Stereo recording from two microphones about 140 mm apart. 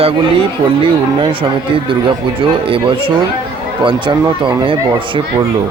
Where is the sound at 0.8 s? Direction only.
40° right (ahead or behind).